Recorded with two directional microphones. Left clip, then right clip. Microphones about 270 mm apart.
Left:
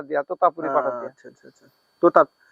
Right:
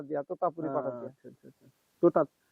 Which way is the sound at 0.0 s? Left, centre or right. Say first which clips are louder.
Left 11 dB; centre.